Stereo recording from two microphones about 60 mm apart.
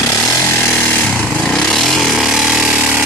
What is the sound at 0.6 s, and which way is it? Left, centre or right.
Chainsaw, left.